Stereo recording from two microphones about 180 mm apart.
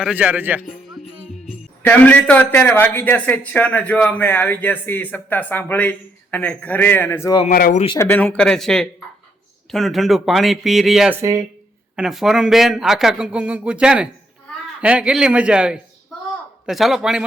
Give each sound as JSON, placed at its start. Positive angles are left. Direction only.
{"t": 0.0, "sound": "speech", "side_deg": -5}
{"t": 1.8, "sound": "a man's voice", "side_deg": 10}
{"t": 7.4, "sound": "speech", "side_deg": 45}
{"t": 7.9, "sound": "a man's voice", "side_deg": 10}
{"t": 11.2, "sound": "speech", "side_deg": -15}
{"t": 11.9, "sound": "a man's voice", "side_deg": 0}